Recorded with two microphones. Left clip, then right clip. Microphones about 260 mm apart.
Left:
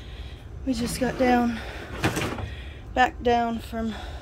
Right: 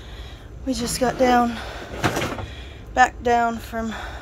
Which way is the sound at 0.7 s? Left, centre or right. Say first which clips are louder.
Right 5 dB; centre.